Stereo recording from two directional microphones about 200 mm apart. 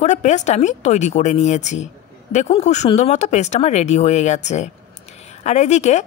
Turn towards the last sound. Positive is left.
turn(degrees=35)  # may be behind; listen again after turning